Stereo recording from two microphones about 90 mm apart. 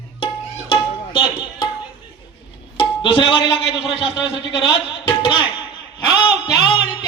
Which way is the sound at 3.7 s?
85° left.